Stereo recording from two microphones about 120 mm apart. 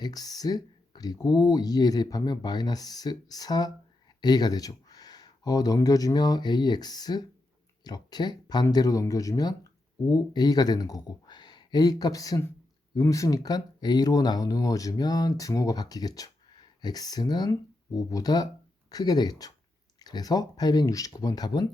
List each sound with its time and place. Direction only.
0.0 s speech: 35° left (ahead or behind)